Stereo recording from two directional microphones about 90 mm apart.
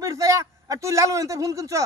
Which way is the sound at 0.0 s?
40° right (ahead or behind).